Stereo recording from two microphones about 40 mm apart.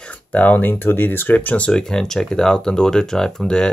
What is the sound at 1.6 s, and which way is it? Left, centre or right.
Speech, left.